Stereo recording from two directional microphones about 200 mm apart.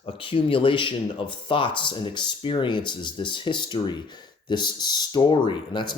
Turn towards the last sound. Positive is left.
turn(degrees=25)  # may be behind; listen again after turning